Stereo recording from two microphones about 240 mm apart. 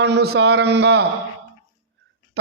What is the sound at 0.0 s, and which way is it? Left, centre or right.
A man's voice, right.